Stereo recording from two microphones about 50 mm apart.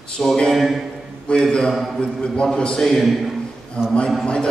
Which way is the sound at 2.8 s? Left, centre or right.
Centre.